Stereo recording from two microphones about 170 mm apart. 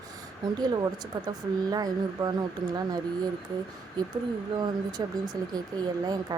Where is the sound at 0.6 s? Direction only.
25° right (ahead or behind).